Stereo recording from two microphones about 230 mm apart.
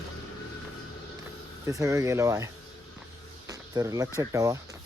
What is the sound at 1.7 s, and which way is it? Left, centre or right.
Speech, centre.